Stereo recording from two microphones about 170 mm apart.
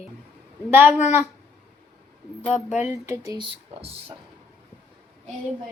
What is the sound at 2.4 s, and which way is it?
Speech, 5° left (ahead or behind).